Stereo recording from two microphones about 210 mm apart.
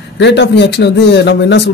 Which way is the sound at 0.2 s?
55° left (ahead or behind).